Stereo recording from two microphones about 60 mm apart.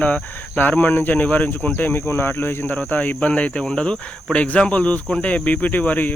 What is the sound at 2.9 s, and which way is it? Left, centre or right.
Speech, left.